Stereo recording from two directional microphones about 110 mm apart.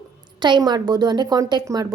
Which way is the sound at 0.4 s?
40° right (ahead or behind).